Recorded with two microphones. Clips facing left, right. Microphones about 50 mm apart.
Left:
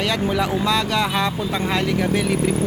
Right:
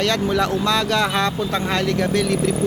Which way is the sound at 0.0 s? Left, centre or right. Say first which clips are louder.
Right 2 dB; centre.